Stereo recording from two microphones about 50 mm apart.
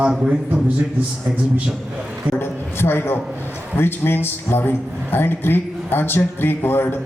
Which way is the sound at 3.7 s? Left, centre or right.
Left.